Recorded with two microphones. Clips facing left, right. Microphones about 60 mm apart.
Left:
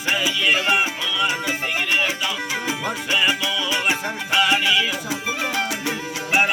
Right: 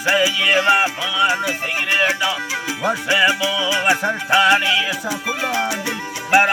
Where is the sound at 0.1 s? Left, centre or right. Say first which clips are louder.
Right 4 dB; right.